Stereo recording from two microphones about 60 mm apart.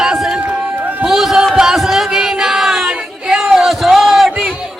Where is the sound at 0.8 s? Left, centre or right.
Right.